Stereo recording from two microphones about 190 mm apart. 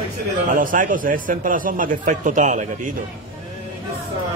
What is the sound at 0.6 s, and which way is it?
A man's voice, 45° right (ahead or behind).